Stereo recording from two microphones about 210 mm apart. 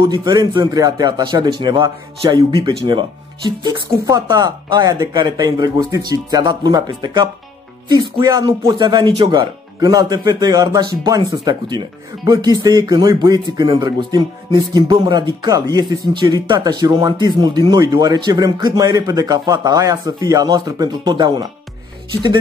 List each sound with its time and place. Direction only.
0.0 s speech: 20° right (ahead or behind)